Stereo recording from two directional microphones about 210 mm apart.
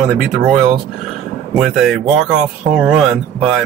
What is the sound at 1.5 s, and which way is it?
Speech, centre (ahead or behind).